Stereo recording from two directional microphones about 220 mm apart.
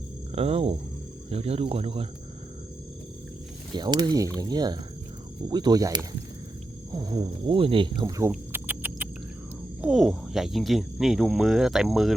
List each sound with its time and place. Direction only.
0.3 s speech: 25° right (ahead or behind)
3.7 s speech: 20° right (ahead or behind)
8.3 s rodents: 10° right (ahead or behind)
9.8 s speech: centre (ahead or behind)